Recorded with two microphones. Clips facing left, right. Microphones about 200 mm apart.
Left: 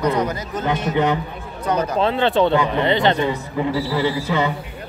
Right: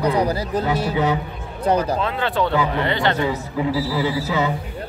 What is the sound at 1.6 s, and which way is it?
Speech, 30° right (ahead or behind).